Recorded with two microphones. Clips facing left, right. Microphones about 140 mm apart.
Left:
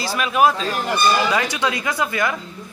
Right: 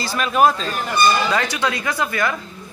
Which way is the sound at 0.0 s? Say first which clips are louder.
Right 1 dB; 5° left (ahead or behind).